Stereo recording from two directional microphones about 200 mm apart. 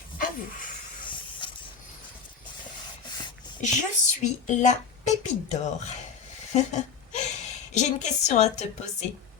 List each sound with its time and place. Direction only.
1.0 s hiss: 25° left (ahead or behind)
3.6 s a woman's voice: 35° left (ahead or behind)